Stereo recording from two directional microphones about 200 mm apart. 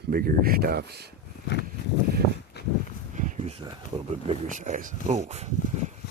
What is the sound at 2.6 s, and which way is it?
Walk, 55° left (ahead or behind).